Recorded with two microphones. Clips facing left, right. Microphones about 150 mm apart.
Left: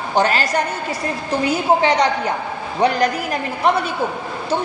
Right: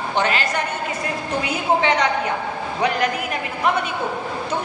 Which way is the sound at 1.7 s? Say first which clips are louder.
Left 2 dB; 35° left (ahead or behind).